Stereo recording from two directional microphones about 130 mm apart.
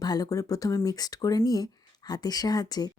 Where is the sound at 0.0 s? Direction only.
30° left (ahead or behind).